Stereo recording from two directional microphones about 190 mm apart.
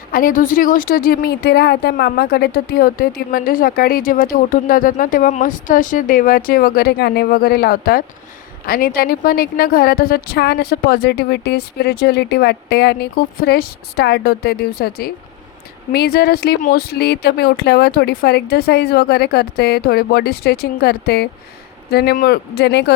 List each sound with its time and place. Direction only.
0.1 s a woman's voice: 45° left (ahead or behind); by 22.9 s 60° left (ahead or behind)